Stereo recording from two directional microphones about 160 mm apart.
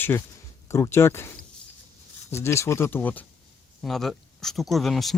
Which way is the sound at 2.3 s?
15° left (ahead or behind).